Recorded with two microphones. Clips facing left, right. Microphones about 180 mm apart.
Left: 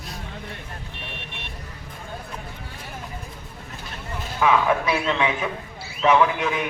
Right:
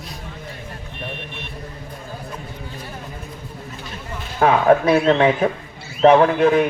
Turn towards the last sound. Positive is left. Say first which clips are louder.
# right 7 dB
turn(degrees=-50)  # may be behind; listen again after turning